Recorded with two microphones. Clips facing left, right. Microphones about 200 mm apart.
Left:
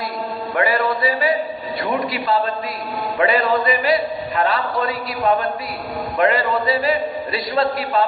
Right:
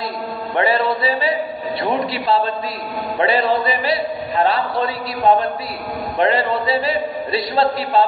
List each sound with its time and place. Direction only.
0.6 s music: 30° right (ahead or behind)
1.8 s a man's voice: 30° right (ahead or behind)
6.1 s a man's voice: 30° right (ahead or behind)